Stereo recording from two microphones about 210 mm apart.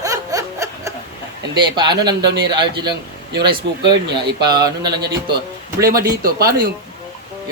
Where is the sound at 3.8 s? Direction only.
55° right (ahead or behind).